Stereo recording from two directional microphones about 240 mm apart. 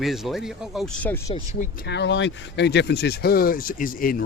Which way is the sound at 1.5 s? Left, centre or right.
Left.